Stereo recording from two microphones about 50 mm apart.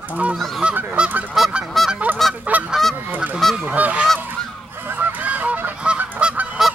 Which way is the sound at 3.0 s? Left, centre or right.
Right.